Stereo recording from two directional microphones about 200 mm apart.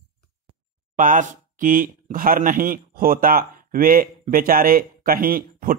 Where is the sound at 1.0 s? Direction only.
40° right (ahead or behind).